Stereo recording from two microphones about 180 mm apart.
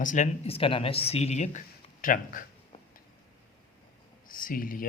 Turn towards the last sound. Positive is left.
turn(degrees=50)  # may be behind; listen again after turning